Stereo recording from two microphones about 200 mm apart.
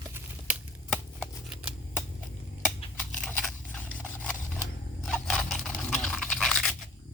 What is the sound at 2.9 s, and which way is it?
Scissors, 5° left (ahead or behind).